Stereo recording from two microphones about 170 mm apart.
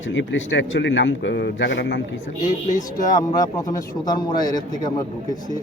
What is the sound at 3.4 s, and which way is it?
A man's voice, 20° left (ahead or behind).